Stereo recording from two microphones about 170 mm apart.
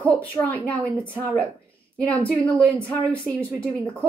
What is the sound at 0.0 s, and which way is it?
Speech, 10° left (ahead or behind).